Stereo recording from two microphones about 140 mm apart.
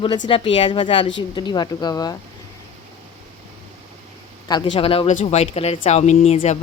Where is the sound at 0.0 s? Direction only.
35° left (ahead or behind).